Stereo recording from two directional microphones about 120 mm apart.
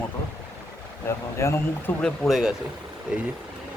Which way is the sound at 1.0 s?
25° left (ahead or behind).